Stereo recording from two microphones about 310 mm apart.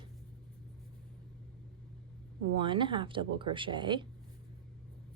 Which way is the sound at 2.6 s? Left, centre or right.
Centre.